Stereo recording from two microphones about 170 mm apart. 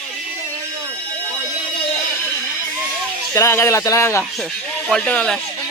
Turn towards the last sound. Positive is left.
turn(degrees=5)  # may be behind; listen again after turning